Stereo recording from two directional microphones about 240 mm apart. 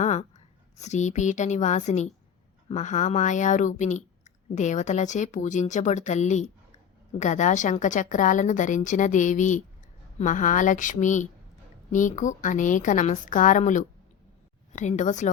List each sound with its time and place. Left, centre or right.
0.0 s a woman's voice: left